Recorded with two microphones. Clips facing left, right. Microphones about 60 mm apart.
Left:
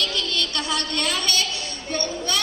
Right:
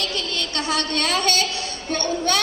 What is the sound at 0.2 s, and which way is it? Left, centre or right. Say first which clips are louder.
Speech: left 1 dB; right.